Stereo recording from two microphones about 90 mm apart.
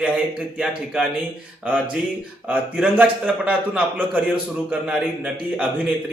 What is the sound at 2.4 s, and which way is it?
A man's voice, 15° right (ahead or behind).